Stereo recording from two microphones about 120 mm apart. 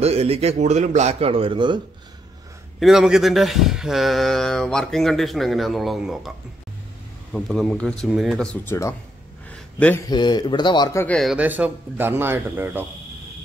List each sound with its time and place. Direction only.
0.0 s speech: 60° right (ahead or behind); by 1.8 s 45° right (ahead or behind)
2.8 s a man's voice: 5° right (ahead or behind)
7.3 s a man's voice: centre (ahead or behind)
8.6 s speech: 25° left (ahead or behind)
9.5 s a sound: 10° left (ahead or behind)
10.0 s speech: 35° left (ahead or behind)
11.1 s a man's voice: 5° left (ahead or behind)
11.3 s speech: 15° right (ahead or behind)